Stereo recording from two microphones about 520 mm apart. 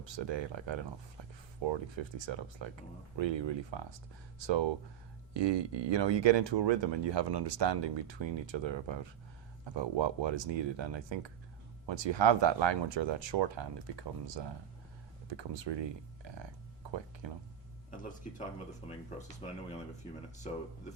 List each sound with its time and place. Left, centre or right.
0.0 s speech: right
18.8 s speech: centre